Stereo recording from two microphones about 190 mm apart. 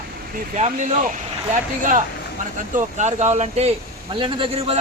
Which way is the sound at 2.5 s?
40° right (ahead or behind).